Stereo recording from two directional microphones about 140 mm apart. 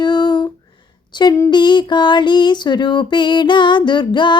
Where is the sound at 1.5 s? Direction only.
35° left (ahead or behind).